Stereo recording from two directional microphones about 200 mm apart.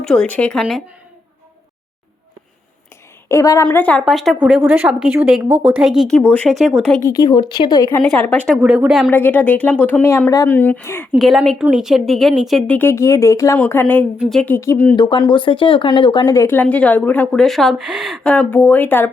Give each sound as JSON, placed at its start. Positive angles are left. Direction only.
{"t": 0.0, "sound": "a woman's voice", "side_deg": 5}
{"t": 3.2, "sound": "a woman's voice", "side_deg": 15}
{"t": 7.0, "sound": "speech", "side_deg": 15}
{"t": 8.5, "sound": "a woman's voice", "side_deg": -5}
{"t": 9.0, "sound": "speech", "side_deg": 10}
{"t": 11.1, "sound": "a woman's voice", "side_deg": 0}